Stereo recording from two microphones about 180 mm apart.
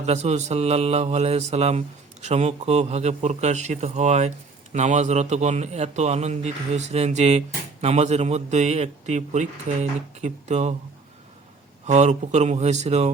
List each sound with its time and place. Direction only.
0.0 s a man's voice: 40° right (ahead or behind)
11.9 s a man's voice: 40° right (ahead or behind)